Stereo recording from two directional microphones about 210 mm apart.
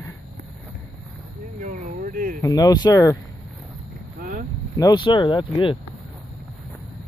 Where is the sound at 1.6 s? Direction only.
35° right (ahead or behind).